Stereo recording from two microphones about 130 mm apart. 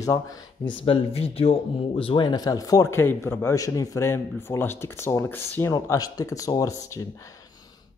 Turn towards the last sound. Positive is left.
turn(degrees=25)  # may be behind; listen again after turning